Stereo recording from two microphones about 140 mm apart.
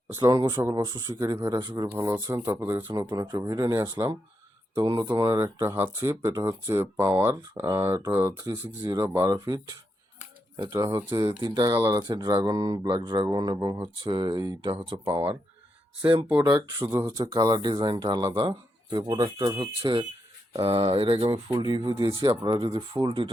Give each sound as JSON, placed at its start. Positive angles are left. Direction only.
{"t": 0.1, "sound": "speech", "side_deg": -25}
{"t": 2.8, "sound": "speech", "side_deg": -30}
{"t": 5.5, "sound": "speech", "side_deg": -15}
{"t": 10.6, "sound": "speech", "side_deg": -25}
{"t": 14.7, "sound": "speech", "side_deg": -35}
{"t": 22.4, "sound": "speech", "side_deg": -35}